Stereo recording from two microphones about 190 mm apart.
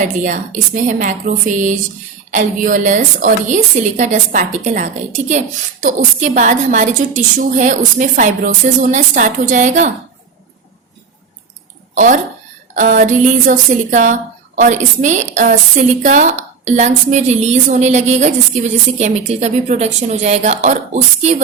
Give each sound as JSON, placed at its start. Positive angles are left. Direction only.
{"t": 0.0, "sound": "a woman's voice", "side_deg": -45}
{"t": 11.9, "sound": "a woman's voice", "side_deg": -45}